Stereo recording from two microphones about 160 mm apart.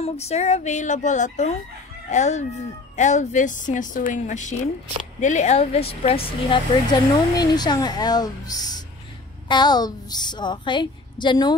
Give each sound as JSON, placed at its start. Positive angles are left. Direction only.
{"t": 0.0, "sound": "a woman's voice", "side_deg": 40}